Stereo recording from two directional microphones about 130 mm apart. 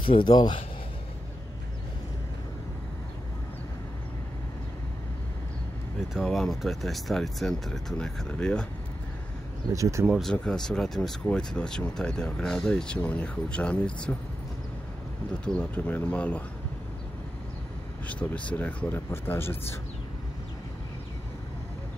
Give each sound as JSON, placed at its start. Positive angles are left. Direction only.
{"t": 0.0, "sound": "a man's voice", "side_deg": 40}
{"t": 5.9, "sound": "speech", "side_deg": 0}
{"t": 9.7, "sound": "speech", "side_deg": -25}
{"t": 10.0, "sound": "speech", "side_deg": -5}
{"t": 10.3, "sound": "speech", "side_deg": 5}
{"t": 15.4, "sound": "speech", "side_deg": 10}
{"t": 18.0, "sound": "speech", "side_deg": 10}